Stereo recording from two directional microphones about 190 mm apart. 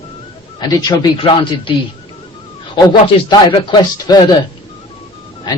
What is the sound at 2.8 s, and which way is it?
Speech, 20° left (ahead or behind).